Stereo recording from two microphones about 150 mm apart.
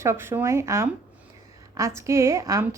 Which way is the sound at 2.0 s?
20° right (ahead or behind).